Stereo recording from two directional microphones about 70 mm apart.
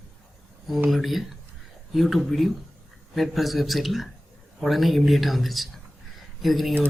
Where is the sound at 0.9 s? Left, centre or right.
Centre.